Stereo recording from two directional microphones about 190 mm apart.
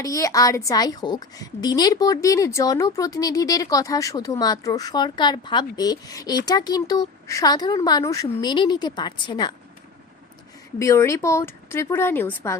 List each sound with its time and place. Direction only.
0.0 s a woman's voice: 15° left (ahead or behind)
10.8 s speech: 15° left (ahead or behind)